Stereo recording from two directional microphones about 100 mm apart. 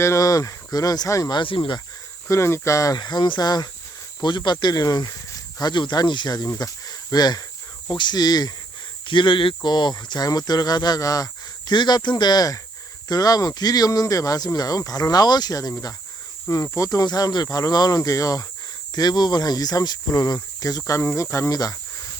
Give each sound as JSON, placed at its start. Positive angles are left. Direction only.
{"t": 0.0, "sound": "speech", "side_deg": 30}
{"t": 2.2, "sound": "speech", "side_deg": 30}
{"t": 3.0, "sound": "speech", "side_deg": 50}
{"t": 9.0, "sound": "speech", "side_deg": 55}
{"t": 9.6, "sound": "speech", "side_deg": 45}
{"t": 16.7, "sound": "speech", "side_deg": 35}